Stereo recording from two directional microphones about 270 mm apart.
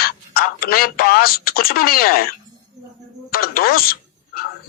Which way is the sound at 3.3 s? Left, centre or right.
Left.